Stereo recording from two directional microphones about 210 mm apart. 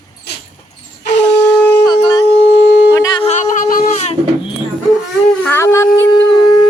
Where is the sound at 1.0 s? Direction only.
55° left (ahead or behind).